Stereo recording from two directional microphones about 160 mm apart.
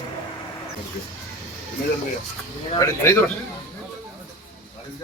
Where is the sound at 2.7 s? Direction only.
15° left (ahead or behind).